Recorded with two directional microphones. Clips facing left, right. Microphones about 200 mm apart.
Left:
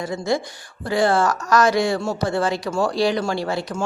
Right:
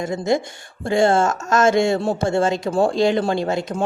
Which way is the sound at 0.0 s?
20° right (ahead or behind).